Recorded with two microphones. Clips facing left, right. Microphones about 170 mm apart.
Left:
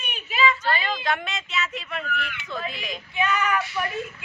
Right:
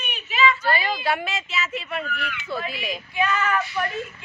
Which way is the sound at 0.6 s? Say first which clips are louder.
Right 2 dB; 10° right (ahead or behind).